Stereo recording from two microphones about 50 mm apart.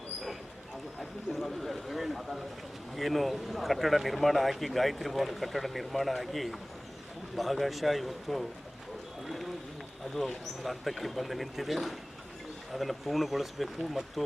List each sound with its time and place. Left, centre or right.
0.9 s speech: centre
9.2 s a sound: centre
10.2 s speech: centre